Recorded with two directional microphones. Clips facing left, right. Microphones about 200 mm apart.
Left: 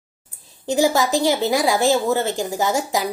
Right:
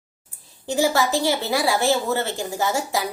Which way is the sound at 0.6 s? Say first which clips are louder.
Left 2 dB; 15° left (ahead or behind).